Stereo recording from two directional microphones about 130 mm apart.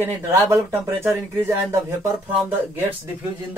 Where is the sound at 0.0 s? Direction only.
20° right (ahead or behind).